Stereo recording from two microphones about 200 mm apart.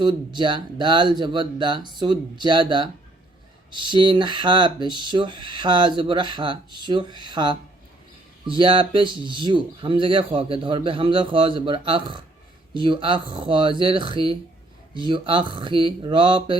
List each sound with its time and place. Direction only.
0.0 s speech: 25° right (ahead or behind)